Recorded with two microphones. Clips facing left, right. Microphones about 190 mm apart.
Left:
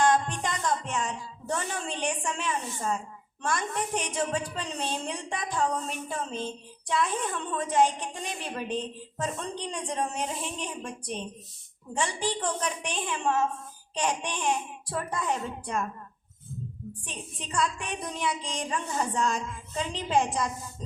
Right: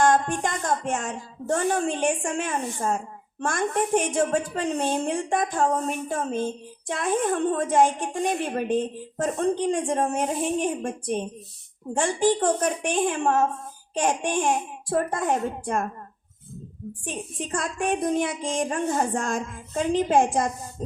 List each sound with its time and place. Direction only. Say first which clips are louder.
0.0 s a woman's voice: right 4 dB; 50° right (ahead or behind)
17.1 s a woman's voice: right 12 dB; 50° right (ahead or behind)